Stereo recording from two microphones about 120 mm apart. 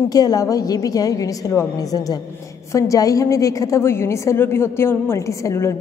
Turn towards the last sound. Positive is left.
turn(degrees=25)  # may be behind; listen again after turning